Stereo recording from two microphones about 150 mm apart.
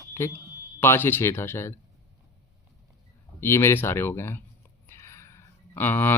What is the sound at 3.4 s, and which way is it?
Speech, 15° left (ahead or behind).